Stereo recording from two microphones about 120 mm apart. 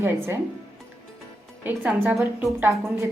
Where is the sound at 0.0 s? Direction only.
20° right (ahead or behind).